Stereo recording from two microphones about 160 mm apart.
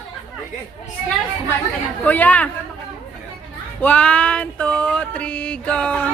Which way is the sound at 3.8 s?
10° left (ahead or behind).